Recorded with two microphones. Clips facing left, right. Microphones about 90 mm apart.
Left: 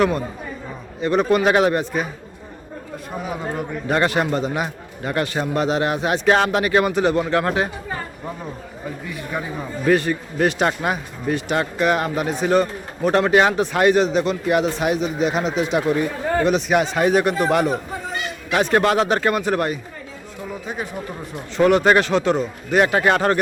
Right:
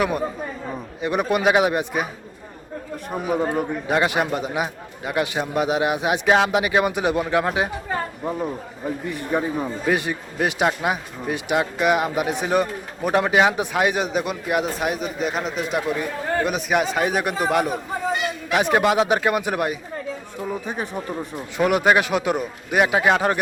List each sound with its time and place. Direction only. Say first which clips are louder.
1.0 s a man's voice: left 3 dB; 15° right (ahead or behind)
3.2 s a man's voice: right 6 dB; 10° right (ahead or behind)
9.8 s a man's voice: left 7 dB; 15° right (ahead or behind)
21.6 s a man's voice: left 3 dB; 10° right (ahead or behind)